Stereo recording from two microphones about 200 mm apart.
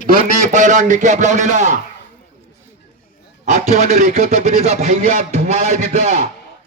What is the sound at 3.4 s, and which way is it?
Speech, 35° right (ahead or behind).